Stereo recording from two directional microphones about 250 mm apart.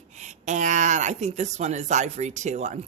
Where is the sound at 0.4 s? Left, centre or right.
Right.